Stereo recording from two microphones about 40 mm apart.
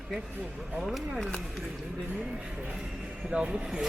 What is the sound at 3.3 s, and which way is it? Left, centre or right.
Speech, right.